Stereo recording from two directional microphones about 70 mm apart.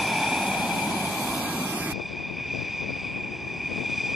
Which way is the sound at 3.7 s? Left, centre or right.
Centre.